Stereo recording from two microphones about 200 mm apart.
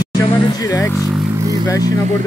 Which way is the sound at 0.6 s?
15° left (ahead or behind).